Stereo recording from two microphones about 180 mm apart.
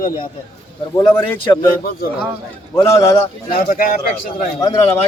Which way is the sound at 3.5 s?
55° left (ahead or behind).